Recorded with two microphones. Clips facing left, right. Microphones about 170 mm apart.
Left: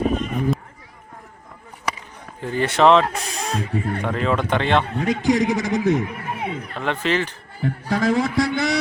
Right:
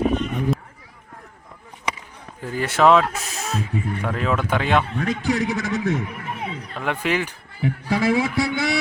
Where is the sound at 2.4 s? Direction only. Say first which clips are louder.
Left 1 dB; 5° right (ahead or behind).